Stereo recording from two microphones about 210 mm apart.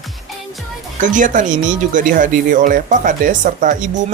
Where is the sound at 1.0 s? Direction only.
40° right (ahead or behind).